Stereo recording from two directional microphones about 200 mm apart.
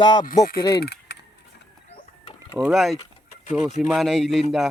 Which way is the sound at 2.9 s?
35° left (ahead or behind).